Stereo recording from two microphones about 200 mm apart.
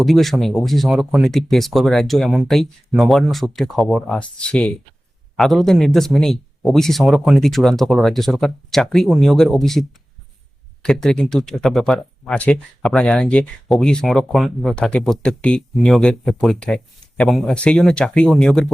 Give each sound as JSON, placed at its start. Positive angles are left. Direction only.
{"t": 0.0, "sound": "speech", "side_deg": 0}
{"t": 10.8, "sound": "speech", "side_deg": 5}